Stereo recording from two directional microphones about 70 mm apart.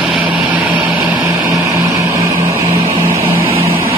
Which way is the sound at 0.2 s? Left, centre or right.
Right.